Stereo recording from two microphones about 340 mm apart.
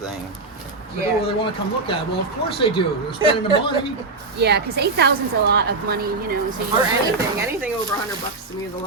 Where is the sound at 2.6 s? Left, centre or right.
Centre.